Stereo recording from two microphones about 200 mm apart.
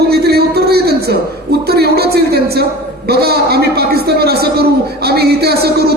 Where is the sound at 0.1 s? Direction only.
50° right (ahead or behind).